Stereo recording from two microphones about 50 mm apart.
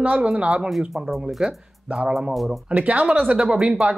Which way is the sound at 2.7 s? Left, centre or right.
Right.